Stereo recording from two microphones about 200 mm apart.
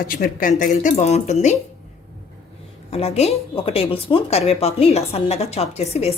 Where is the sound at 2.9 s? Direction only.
30° left (ahead or behind).